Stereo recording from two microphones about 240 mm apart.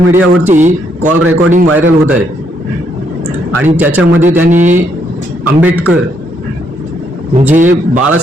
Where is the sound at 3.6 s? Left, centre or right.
Centre.